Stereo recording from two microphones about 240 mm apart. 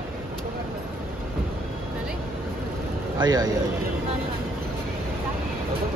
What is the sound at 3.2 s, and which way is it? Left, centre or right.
Speech, centre.